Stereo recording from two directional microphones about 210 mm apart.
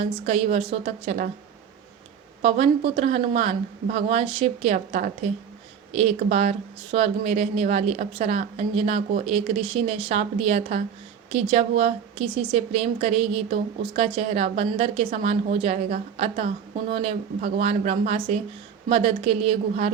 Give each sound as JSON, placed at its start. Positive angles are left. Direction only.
{"t": 0.3, "sound": "speech", "side_deg": -30}
{"t": 2.4, "sound": "speech", "side_deg": -30}
{"t": 4.9, "sound": "speech", "side_deg": -40}
{"t": 5.9, "sound": "speech", "side_deg": -30}